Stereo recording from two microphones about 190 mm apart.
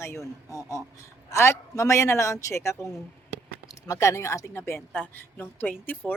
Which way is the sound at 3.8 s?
15° left (ahead or behind).